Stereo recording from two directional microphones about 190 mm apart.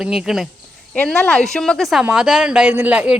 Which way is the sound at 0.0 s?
5° right (ahead or behind).